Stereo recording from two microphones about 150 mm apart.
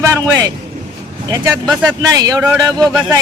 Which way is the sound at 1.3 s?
20° right (ahead or behind).